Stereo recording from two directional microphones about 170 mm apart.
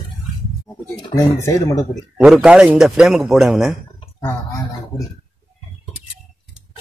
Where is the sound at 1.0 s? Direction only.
20° left (ahead or behind).